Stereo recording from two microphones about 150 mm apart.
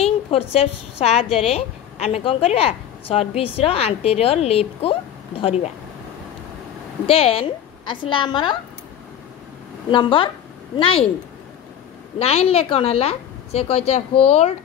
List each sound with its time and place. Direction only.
0.0 s a woman's voice: 40° left (ahead or behind)
7.1 s a woman's voice: 40° left (ahead or behind)
9.8 s a woman's voice: 35° left (ahead or behind)
12.2 s a woman's voice: 40° left (ahead or behind)